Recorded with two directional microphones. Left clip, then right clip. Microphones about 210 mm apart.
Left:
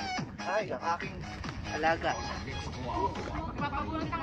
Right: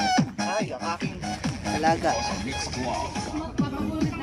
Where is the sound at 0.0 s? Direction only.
40° right (ahead or behind).